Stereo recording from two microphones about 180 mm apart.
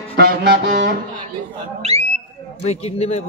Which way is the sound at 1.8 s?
35° right (ahead or behind).